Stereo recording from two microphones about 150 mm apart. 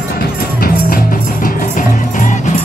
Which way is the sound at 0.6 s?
75° left (ahead or behind).